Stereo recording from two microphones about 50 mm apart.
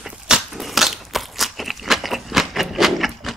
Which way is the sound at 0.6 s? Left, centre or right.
Centre.